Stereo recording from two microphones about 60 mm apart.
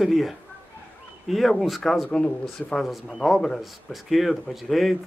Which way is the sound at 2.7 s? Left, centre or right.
Centre.